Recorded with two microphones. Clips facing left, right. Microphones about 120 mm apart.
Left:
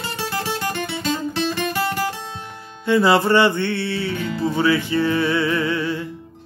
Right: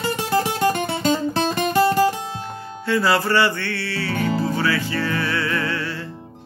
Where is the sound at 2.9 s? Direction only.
20° left (ahead or behind).